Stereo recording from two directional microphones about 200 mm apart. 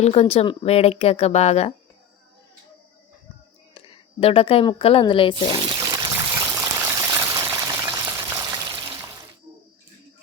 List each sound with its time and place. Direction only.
0.0 s speech: 30° left (ahead or behind)
3.8 s a woman's voice: 30° left (ahead or behind)
5.5 s water: 25° right (ahead or behind)